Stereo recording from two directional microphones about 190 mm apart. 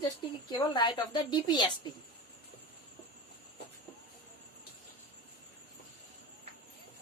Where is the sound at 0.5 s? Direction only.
25° left (ahead or behind).